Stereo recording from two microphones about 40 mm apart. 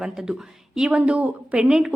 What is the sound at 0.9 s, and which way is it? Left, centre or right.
Speech, right.